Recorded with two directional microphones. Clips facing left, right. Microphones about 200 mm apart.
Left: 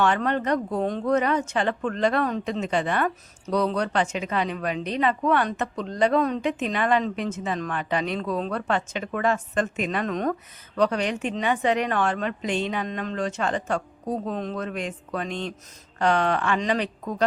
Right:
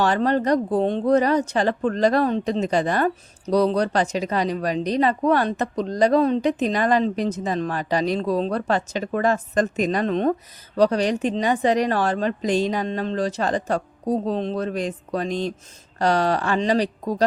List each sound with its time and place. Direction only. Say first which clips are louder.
0.0 s speech: right 3 dB; 35° right (ahead or behind)